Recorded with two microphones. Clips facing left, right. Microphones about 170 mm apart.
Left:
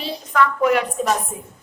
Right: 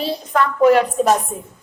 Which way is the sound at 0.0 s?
35° right (ahead or behind).